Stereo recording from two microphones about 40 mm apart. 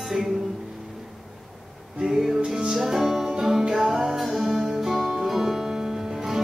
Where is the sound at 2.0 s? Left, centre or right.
Centre.